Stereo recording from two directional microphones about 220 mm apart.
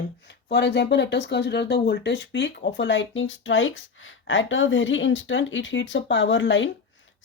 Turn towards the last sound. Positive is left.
turn(degrees=55)  # may be behind; listen again after turning